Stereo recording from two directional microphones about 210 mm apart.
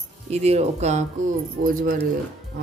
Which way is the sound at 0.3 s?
30° right (ahead or behind).